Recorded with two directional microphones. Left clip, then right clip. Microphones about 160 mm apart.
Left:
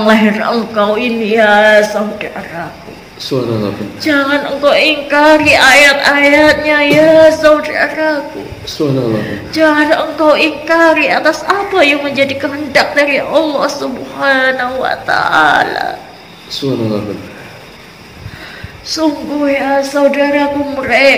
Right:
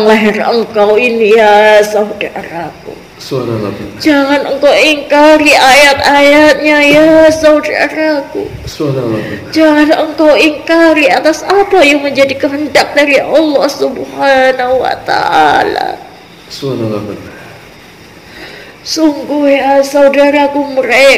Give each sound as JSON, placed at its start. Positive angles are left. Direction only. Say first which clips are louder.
{"t": 0.0, "sound": "a woman's voice", "louder": "right 3 dB", "side_deg": -55}
{"t": 3.3, "sound": "a man's voice", "louder": "even", "side_deg": 25}
{"t": 4.0, "sound": "a woman's voice", "louder": "right 3 dB", "side_deg": -55}
{"t": 8.8, "sound": "a man's voice", "louder": "even", "side_deg": 25}
{"t": 9.5, "sound": "a woman's voice", "louder": "right 3 dB", "side_deg": -60}
{"t": 18.9, "sound": "a woman's voice", "louder": "right 4 dB", "side_deg": -60}